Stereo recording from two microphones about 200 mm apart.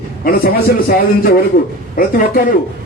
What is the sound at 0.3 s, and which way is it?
A man's voice, 45° left (ahead or behind).